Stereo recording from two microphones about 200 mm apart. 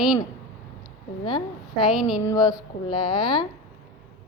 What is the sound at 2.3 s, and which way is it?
A woman's voice, 20° left (ahead or behind).